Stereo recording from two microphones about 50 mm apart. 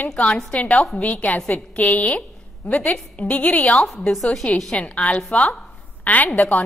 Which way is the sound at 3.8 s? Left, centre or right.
Centre.